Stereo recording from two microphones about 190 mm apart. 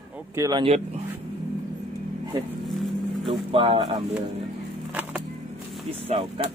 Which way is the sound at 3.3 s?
30° right (ahead or behind).